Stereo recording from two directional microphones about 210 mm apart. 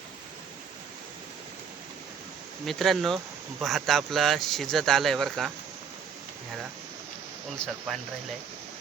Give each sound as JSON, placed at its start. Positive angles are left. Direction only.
{"t": 2.6, "sound": "speech", "side_deg": 0}
{"t": 7.5, "sound": "speech", "side_deg": 5}